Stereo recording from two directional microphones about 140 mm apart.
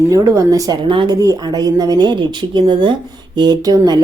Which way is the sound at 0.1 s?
25° right (ahead or behind).